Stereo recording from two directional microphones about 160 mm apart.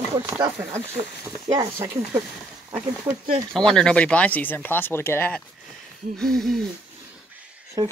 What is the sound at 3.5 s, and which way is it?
Speech, 5° left (ahead or behind).